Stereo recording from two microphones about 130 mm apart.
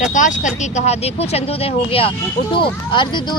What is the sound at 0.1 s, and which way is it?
Speech, 75° left (ahead or behind).